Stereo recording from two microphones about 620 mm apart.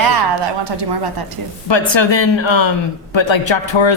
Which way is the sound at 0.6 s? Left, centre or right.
Right.